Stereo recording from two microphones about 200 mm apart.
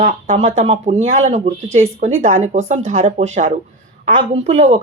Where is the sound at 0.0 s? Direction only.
40° right (ahead or behind).